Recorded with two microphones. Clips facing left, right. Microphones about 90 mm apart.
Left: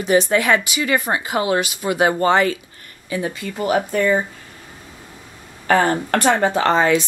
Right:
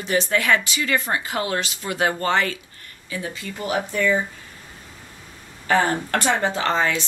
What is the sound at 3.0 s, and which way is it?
Speech, 55° left (ahead or behind).